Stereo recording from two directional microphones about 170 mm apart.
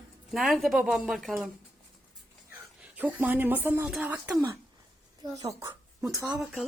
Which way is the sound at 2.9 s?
10° right (ahead or behind).